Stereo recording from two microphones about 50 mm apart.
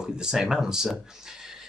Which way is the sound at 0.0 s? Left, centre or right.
Centre.